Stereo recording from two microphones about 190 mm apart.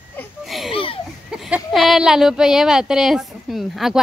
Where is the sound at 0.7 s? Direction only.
30° left (ahead or behind).